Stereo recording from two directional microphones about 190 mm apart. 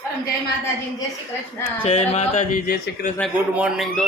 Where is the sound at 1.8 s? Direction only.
35° left (ahead or behind).